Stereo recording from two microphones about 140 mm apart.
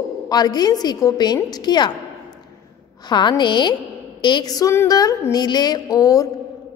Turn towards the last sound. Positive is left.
turn(degrees=25)  # may be behind; listen again after turning